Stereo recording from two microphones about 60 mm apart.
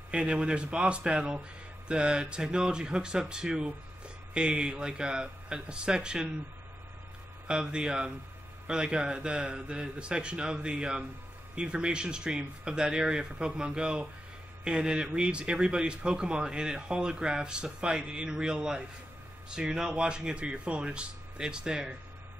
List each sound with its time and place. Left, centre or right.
0.1 s speech: centre
7.4 s speech: centre